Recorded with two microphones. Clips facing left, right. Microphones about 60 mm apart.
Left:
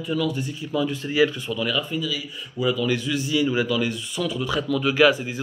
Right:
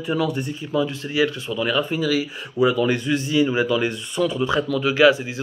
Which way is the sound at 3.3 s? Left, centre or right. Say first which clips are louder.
Right 2 dB; right.